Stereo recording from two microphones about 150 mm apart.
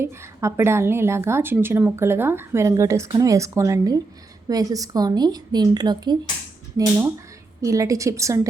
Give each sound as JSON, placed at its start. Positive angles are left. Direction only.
{"t": 0.0, "sound": "a woman's voice", "side_deg": -20}
{"t": 7.6, "sound": "a woman's voice", "side_deg": -20}